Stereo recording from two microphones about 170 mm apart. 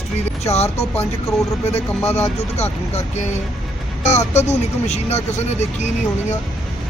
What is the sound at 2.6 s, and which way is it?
Speech, 40° left (ahead or behind).